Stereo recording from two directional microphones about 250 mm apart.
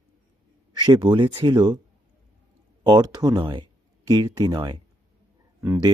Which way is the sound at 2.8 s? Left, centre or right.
Centre.